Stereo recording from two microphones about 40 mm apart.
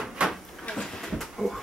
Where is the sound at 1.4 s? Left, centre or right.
Centre.